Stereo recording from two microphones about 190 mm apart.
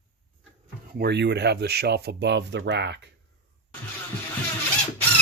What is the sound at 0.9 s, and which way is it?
Speech, 60° right (ahead or behind).